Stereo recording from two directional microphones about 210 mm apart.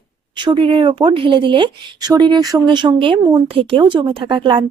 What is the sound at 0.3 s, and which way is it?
Speech, 25° right (ahead or behind).